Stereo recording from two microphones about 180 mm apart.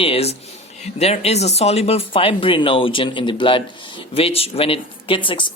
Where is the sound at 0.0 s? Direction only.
35° left (ahead or behind).